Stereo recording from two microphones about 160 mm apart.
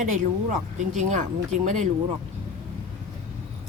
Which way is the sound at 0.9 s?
50° right (ahead or behind).